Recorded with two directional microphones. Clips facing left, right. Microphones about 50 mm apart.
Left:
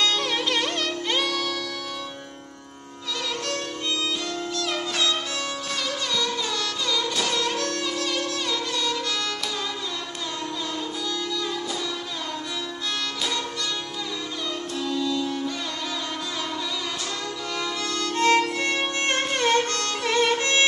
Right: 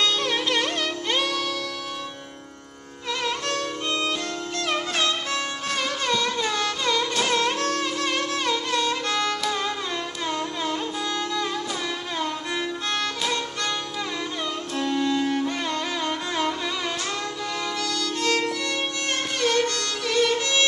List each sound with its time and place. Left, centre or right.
0.0 s music: centre
3.3 s music: right
14.8 s music: right
17.8 s music: left